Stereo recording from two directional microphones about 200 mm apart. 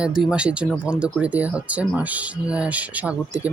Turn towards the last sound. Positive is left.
turn(degrees=-5)  # may be behind; listen again after turning